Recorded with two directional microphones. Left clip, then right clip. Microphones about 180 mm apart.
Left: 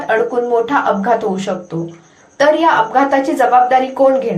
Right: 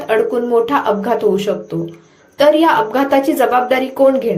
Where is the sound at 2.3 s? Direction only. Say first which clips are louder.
Even; 30° right (ahead or behind).